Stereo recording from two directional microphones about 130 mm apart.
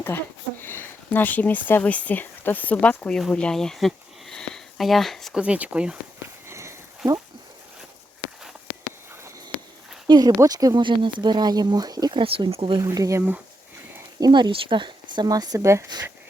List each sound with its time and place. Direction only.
0.0 s speech: 15° left (ahead or behind); by 5.4 s centre (ahead or behind)
5.4 s speech: 10° right (ahead or behind)
6.5 s sniff: 20° right (ahead or behind)
10.1 s speech: 30° right (ahead or behind)
12.2 s speech: 45° right (ahead or behind)
12.8 s speech: 25° right (ahead or behind)
14.2 s speech: 30° right (ahead or behind)